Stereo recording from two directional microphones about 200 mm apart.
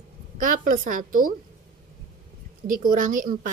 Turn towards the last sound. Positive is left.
turn(degrees=-40)  # may be behind; listen again after turning